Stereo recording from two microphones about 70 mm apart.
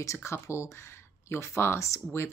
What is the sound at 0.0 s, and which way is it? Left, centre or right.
Speech, left.